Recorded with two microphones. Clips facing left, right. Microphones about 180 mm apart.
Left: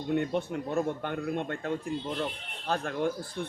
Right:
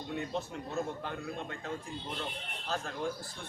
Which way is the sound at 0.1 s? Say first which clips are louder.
Left 9 dB; 60° left (ahead or behind).